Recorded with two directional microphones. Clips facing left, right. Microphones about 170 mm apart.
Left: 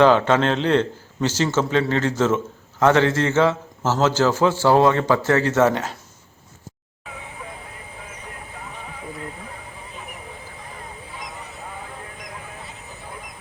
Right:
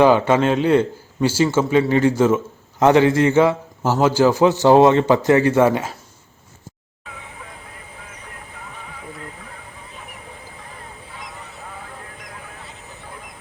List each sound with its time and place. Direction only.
0.0 s a man's voice: 10° right (ahead or behind)